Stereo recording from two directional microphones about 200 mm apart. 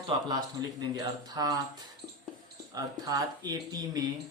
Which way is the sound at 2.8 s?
20° right (ahead or behind).